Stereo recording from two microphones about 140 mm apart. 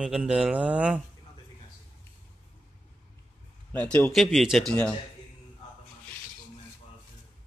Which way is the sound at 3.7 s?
10° left (ahead or behind).